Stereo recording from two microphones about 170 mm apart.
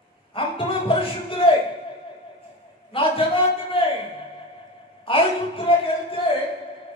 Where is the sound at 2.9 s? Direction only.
30° left (ahead or behind).